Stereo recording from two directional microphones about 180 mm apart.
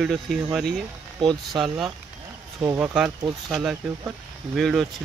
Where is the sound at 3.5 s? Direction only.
Centre (ahead or behind).